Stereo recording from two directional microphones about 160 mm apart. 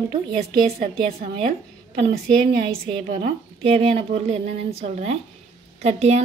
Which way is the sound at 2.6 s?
35° right (ahead or behind).